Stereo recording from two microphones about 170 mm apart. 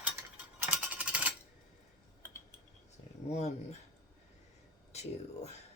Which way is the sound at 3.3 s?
40° left (ahead or behind).